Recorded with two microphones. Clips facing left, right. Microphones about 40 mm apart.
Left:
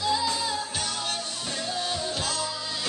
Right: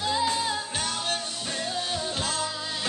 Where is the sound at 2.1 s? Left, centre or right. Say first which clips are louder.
Even; right.